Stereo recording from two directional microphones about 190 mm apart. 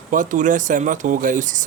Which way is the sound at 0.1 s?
40° right (ahead or behind).